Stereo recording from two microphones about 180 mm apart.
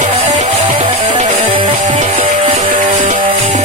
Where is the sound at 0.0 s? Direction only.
35° right (ahead or behind).